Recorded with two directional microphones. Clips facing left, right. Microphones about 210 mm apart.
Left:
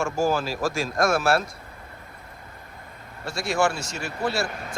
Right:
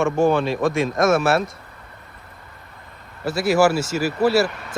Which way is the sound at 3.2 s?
5° right (ahead or behind).